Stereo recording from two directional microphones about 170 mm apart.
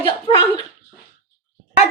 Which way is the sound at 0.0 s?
30° left (ahead or behind).